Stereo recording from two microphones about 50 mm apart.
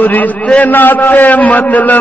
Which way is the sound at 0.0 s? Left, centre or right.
Left.